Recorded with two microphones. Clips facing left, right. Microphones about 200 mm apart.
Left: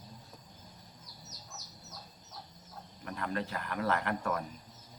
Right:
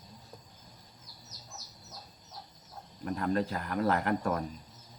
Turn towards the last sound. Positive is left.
turn(degrees=-40)  # may be behind; listen again after turning